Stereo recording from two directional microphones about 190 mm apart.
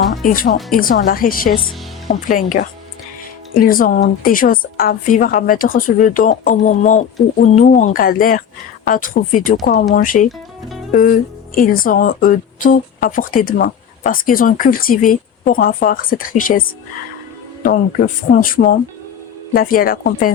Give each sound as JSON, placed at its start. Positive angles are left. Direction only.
{"t": 0.3, "sound": "speech", "side_deg": 45}
{"t": 10.2, "sound": "music", "side_deg": 0}
{"t": 10.9, "sound": "speech", "side_deg": 45}